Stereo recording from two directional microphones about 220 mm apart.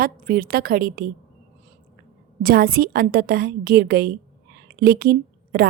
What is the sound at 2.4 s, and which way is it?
A woman's voice, 40° right (ahead or behind).